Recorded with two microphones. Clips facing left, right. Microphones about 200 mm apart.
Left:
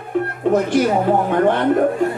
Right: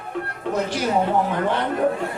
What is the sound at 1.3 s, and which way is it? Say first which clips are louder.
Speech: left 7 dB; 50° left (ahead or behind).